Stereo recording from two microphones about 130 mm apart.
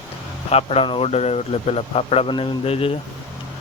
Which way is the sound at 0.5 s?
50° left (ahead or behind).